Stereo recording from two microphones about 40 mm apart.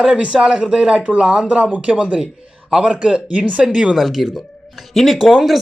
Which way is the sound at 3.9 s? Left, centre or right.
Centre.